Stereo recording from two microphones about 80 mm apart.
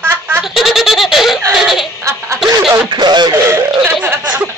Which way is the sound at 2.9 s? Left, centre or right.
Right.